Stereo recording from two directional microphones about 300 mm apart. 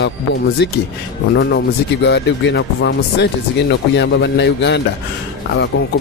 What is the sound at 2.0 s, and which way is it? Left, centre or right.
Speech, left.